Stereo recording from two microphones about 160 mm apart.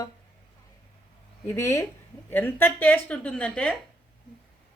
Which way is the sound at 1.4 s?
15° left (ahead or behind).